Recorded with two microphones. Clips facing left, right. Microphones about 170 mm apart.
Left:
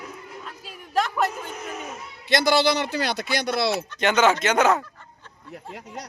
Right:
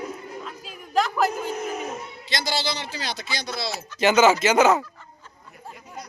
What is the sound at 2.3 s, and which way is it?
Speech, 60° left (ahead or behind).